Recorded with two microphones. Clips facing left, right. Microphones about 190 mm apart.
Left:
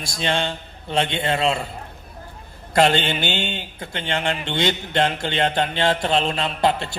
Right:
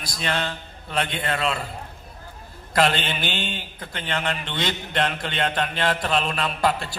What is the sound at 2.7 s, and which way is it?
A man's voice, 25° left (ahead or behind).